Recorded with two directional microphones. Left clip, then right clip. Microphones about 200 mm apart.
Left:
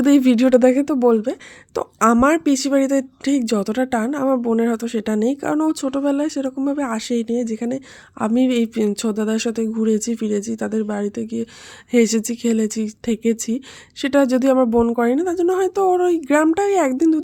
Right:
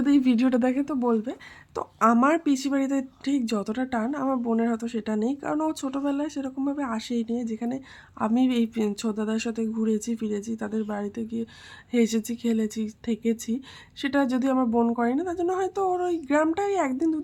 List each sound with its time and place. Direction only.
0.0 s speech: 40° left (ahead or behind)